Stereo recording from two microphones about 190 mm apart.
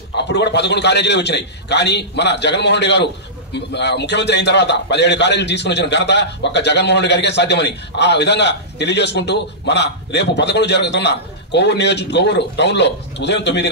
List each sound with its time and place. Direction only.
0.2 s a man's voice: 65° left (ahead or behind)